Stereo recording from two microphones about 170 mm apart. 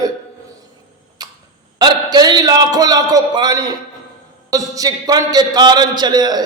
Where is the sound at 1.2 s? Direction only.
25° right (ahead or behind).